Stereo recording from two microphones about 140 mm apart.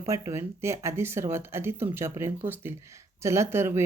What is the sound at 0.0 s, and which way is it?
Speech, 20° right (ahead or behind).